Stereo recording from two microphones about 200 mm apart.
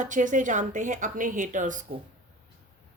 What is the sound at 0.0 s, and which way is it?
A woman's voice, 40° right (ahead or behind).